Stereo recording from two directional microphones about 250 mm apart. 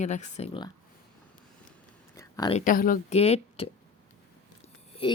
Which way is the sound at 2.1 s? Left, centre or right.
Centre.